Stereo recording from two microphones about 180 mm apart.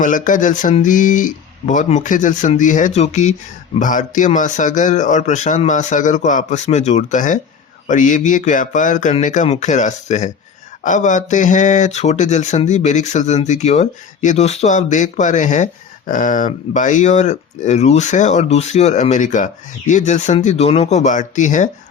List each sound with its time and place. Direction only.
0.0 s speech: 45° left (ahead or behind)